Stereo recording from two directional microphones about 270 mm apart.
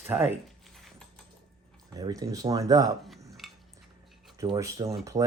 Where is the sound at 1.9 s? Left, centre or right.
Centre.